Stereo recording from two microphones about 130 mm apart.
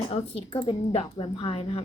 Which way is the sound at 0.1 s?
45° left (ahead or behind).